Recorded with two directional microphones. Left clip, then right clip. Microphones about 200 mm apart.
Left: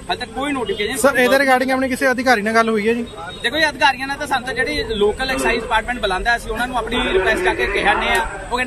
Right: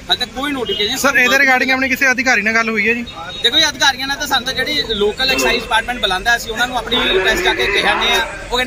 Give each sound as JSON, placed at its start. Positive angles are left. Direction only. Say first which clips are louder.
{"t": 0.1, "sound": "speech", "louder": "right 4 dB", "side_deg": 0}
{"t": 1.0, "sound": "a man's voice", "louder": "right 2 dB", "side_deg": 15}
{"t": 3.4, "sound": "speech", "louder": "right 3 dB", "side_deg": 0}